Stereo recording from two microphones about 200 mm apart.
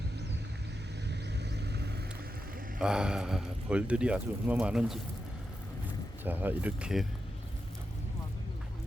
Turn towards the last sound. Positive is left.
turn(degrees=-5)  # may be behind; listen again after turning